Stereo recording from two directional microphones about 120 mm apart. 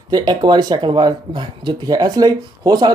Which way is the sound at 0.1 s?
35° right (ahead or behind).